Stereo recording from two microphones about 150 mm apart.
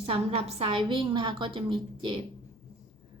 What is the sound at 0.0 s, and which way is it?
A woman's voice, 40° right (ahead or behind).